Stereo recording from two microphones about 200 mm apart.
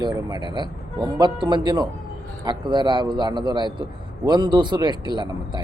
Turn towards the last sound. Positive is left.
turn(degrees=-25)  # may be behind; listen again after turning